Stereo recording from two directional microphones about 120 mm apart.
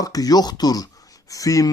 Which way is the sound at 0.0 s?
30° left (ahead or behind).